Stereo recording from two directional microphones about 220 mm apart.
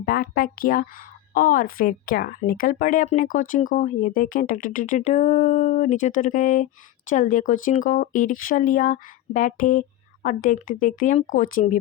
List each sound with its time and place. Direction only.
0.0 s a woman's voice: 45° left (ahead or behind)